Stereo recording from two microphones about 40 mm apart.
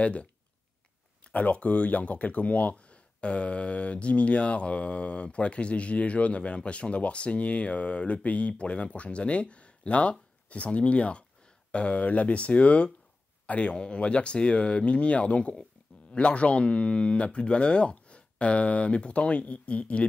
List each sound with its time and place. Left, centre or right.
0.0 s speech: left